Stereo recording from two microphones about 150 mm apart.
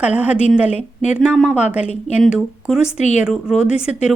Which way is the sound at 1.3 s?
Centre (ahead or behind).